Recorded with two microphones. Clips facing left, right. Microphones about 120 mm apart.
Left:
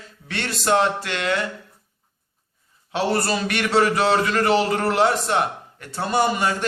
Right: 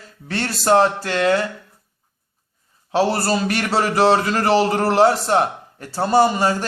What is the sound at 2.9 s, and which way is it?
A man's voice, 35° right (ahead or behind).